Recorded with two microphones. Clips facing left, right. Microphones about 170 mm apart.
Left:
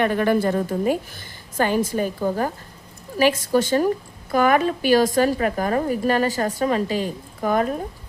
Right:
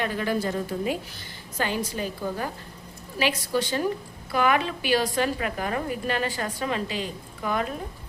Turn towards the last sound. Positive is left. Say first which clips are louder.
# left 7 dB
turn(degrees=45)  # may be behind; listen again after turning